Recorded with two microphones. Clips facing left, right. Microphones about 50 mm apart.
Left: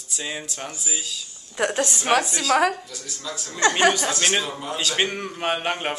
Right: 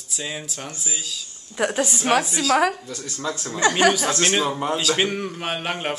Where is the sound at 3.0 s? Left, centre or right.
Right.